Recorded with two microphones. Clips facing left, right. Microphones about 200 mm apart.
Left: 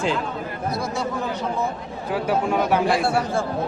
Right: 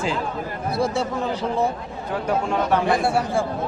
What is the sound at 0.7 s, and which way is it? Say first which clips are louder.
Speech: right 4 dB; 30° right (ahead or behind).